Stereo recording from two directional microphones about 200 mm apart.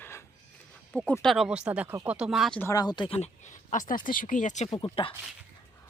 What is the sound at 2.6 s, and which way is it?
Speech, 15° left (ahead or behind).